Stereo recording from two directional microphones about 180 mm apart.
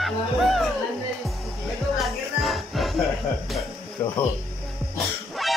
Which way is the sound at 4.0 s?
15° left (ahead or behind).